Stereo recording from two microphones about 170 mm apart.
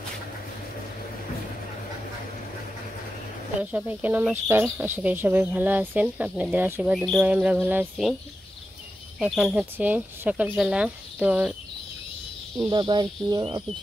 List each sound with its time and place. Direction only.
3.7 s speech: 10° right (ahead or behind)
9.2 s speech: 5° right (ahead or behind)
12.5 s speech: 25° right (ahead or behind)